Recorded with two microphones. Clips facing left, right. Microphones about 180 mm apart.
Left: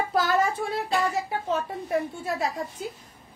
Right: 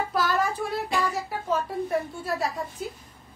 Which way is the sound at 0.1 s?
25° left (ahead or behind).